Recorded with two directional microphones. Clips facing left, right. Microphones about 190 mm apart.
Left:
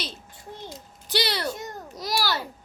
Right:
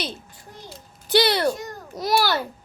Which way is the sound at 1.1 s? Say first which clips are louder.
Right 8 dB; 55° right (ahead or behind).